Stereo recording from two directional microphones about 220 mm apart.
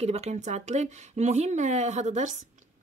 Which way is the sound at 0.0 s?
30° right (ahead or behind).